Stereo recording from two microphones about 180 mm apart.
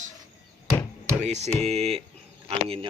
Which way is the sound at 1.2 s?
40° right (ahead or behind).